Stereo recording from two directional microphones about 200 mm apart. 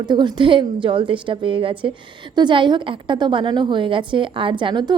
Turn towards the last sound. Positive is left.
turn(degrees=-20)  # may be behind; listen again after turning